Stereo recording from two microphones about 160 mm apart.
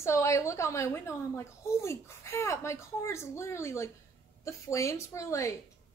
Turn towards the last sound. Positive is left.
turn(degrees=20)  # may be behind; listen again after turning